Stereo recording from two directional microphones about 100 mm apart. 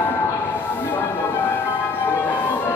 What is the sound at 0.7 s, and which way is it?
Music, 20° left (ahead or behind).